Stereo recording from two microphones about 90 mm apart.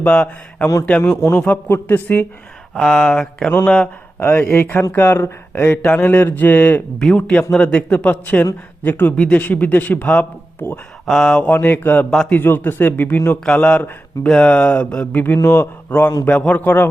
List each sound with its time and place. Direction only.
0.0 s speech: 15° left (ahead or behind)
2.7 s speech: 10° left (ahead or behind)
4.2 s speech: 25° left (ahead or behind)
11.0 s speech: 5° left (ahead or behind)
11.5 s speech: 20° left (ahead or behind)
13.4 s speech: 10° left (ahead or behind)
15.4 s speech: 30° left (ahead or behind)